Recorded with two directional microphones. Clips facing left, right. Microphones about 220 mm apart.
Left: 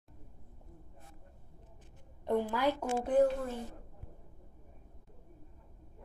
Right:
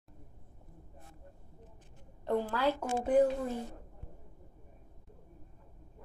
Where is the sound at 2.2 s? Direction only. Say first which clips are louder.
Even; 15° left (ahead or behind).